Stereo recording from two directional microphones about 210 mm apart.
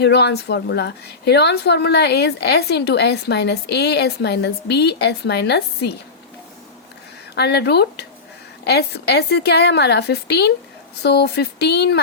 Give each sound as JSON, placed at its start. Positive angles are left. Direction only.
{"t": 0.0, "sound": "a woman's voice", "side_deg": 50}
{"t": 7.3, "sound": "a woman's voice", "side_deg": 50}